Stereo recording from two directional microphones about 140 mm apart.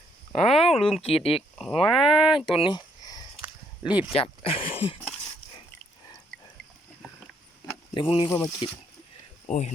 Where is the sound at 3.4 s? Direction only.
10° right (ahead or behind).